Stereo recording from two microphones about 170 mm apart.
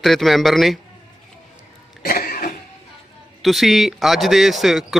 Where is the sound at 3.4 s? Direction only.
Centre (ahead or behind).